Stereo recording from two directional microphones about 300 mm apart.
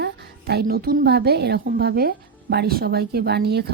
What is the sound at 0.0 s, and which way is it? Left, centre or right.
A woman's voice, right.